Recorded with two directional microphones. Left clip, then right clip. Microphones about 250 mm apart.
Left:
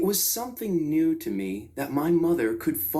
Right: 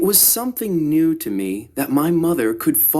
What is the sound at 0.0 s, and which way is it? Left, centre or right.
Speech, right.